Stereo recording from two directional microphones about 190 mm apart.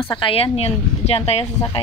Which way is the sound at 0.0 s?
25° left (ahead or behind).